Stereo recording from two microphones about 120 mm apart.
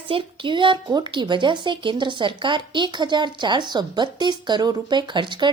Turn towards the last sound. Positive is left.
turn(degrees=-40)  # may be behind; listen again after turning